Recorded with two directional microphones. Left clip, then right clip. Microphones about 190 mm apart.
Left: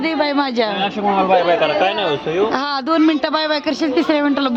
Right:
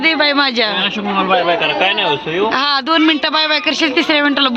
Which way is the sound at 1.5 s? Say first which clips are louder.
Right 1 dB; 30° left (ahead or behind).